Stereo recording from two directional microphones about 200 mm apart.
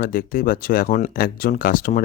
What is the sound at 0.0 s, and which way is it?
Speech, 45° left (ahead or behind).